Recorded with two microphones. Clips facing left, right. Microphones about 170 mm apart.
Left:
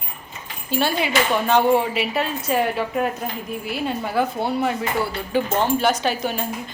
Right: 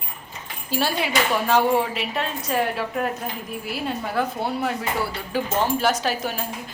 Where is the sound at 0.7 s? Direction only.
Centre (ahead or behind).